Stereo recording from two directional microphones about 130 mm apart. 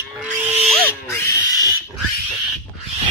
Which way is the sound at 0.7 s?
20° left (ahead or behind).